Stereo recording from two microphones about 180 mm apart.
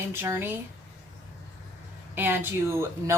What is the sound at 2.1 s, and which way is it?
Speech, 10° right (ahead or behind).